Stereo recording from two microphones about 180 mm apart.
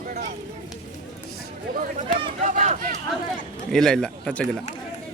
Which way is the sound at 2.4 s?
40° right (ahead or behind).